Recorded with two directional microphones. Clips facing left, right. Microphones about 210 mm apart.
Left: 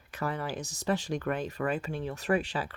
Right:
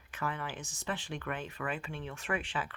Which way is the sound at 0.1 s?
40° left (ahead or behind).